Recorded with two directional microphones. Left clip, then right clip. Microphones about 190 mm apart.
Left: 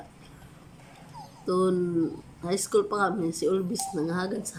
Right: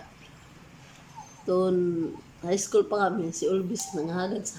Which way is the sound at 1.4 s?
5° left (ahead or behind).